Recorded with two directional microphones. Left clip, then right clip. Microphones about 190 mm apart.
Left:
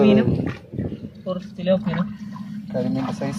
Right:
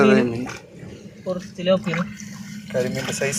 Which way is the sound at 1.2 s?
20° right (ahead or behind).